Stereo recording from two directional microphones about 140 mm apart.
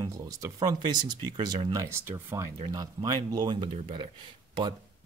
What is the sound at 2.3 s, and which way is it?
Speech, 25° right (ahead or behind).